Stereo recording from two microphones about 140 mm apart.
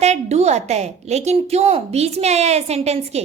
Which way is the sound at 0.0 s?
50° right (ahead or behind).